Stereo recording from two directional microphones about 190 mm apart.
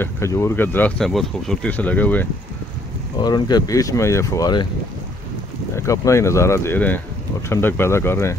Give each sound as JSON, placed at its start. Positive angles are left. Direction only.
{"t": 0.0, "sound": "speech", "side_deg": 15}
{"t": 3.2, "sound": "speech", "side_deg": 20}
{"t": 5.8, "sound": "speech", "side_deg": 15}